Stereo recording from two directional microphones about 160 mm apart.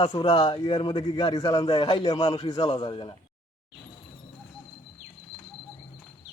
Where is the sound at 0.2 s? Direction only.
30° left (ahead or behind).